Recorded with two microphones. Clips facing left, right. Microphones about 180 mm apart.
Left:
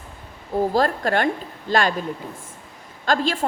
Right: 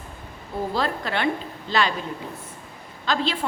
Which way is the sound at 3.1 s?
45° left (ahead or behind).